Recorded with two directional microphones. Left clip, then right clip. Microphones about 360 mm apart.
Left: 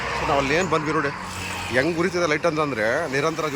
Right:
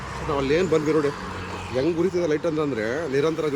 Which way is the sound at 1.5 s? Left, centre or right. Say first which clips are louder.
Left 6 dB; centre.